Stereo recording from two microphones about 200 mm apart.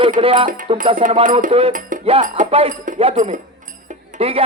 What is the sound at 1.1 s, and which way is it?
Speech, 40° right (ahead or behind).